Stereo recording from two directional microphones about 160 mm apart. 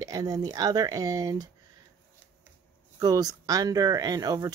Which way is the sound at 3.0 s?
20° right (ahead or behind).